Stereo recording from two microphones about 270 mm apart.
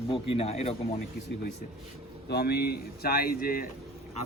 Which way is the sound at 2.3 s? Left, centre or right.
Left.